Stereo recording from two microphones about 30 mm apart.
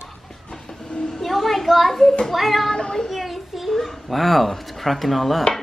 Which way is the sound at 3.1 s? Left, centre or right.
Centre.